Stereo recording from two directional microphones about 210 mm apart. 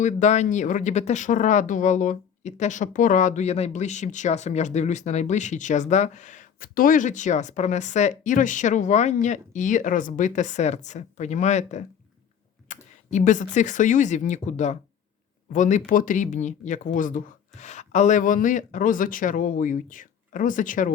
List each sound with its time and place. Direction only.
0.0 s speech: 35° left (ahead or behind)